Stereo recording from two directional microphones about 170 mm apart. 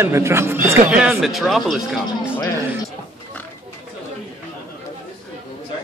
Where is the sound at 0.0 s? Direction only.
15° right (ahead or behind).